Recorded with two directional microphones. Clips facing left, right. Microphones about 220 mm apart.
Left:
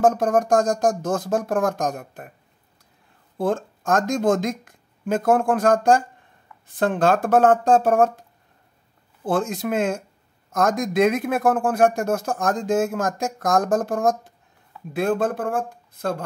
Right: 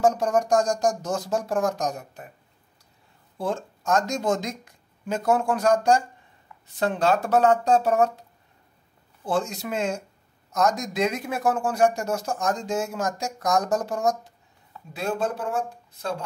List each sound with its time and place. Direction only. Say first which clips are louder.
0.0 s speech: left 3 dB; 55° left (ahead or behind)
3.3 s speech: left 5 dB; 55° left (ahead or behind)